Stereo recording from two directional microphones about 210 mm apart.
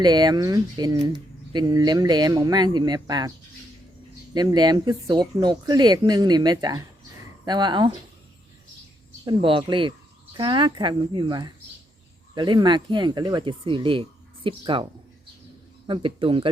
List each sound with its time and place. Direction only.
0.0 s speech: 20° right (ahead or behind)
4.4 s speech: 20° right (ahead or behind)
9.2 s speech: 25° right (ahead or behind)
15.9 s speech: 25° right (ahead or behind)